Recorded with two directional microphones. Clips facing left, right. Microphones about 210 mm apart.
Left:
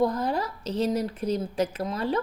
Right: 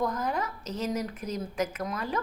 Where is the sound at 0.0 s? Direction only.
30° left (ahead or behind).